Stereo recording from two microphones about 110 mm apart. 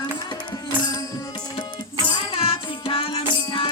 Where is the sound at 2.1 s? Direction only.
55° left (ahead or behind).